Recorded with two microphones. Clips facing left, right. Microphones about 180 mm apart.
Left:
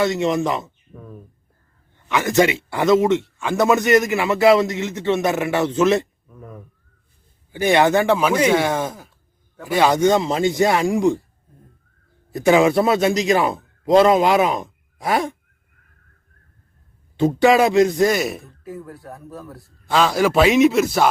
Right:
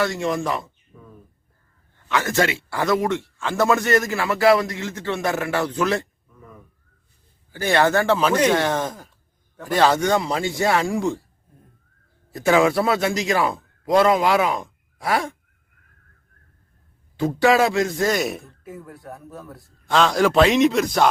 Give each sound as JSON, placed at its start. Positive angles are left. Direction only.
{"t": 0.0, "sound": "speech", "side_deg": 20}
{"t": 2.0, "sound": "speech", "side_deg": 15}
{"t": 6.3, "sound": "a sound", "side_deg": 55}
{"t": 7.5, "sound": "speech", "side_deg": 15}
{"t": 10.0, "sound": "speech", "side_deg": 20}
{"t": 12.3, "sound": "a man's voice", "side_deg": 20}
{"t": 17.2, "sound": "speech", "side_deg": 20}
{"t": 18.2, "sound": "speech", "side_deg": 0}